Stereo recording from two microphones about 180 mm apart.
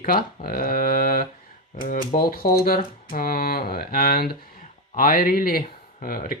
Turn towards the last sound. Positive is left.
turn(degrees=50)  # may be behind; listen again after turning